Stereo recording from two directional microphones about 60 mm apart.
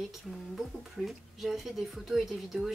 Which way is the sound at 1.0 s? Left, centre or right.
Centre.